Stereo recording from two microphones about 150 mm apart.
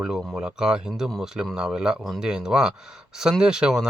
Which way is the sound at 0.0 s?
Centre (ahead or behind).